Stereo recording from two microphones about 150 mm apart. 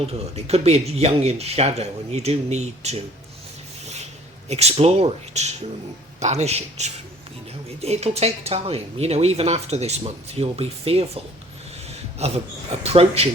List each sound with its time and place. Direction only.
0.1 s speech: 45° right (ahead or behind)
4.4 s speech: 45° right (ahead or behind)
12.2 s speech: 45° right (ahead or behind)